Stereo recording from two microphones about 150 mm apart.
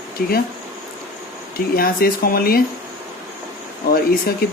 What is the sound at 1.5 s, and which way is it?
Speech, 80° left.